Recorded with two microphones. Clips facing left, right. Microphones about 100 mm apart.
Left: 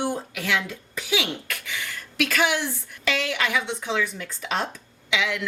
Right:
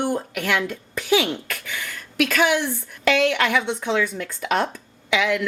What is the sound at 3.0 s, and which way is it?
A woman's voice, 60° right (ahead or behind).